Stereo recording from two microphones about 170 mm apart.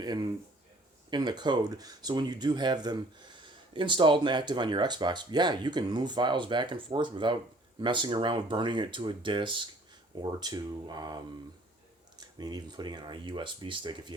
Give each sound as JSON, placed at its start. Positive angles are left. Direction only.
{"t": 0.0, "sound": "speech", "side_deg": -25}